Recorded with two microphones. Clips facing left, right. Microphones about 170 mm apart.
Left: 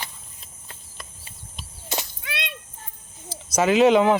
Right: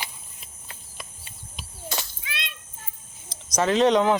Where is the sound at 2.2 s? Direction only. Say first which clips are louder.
Left 5 dB; 65° left (ahead or behind).